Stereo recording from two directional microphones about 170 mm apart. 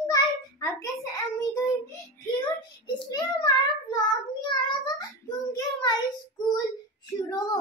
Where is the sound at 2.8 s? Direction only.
25° left (ahead or behind).